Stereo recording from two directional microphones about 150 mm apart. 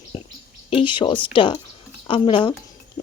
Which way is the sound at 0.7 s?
35° left (ahead or behind).